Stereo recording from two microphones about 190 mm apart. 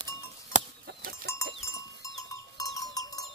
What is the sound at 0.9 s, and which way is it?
Goat, 55° right (ahead or behind).